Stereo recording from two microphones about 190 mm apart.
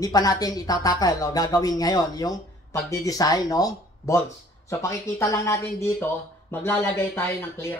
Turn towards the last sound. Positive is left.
turn(degrees=15)  # may be behind; listen again after turning